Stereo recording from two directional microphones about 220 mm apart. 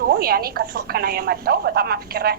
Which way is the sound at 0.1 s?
45° right (ahead or behind).